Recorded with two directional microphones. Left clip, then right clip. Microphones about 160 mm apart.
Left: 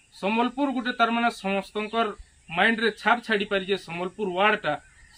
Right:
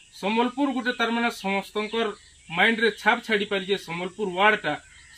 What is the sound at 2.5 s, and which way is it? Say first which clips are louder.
Speech: right 1 dB; 25° left (ahead or behind).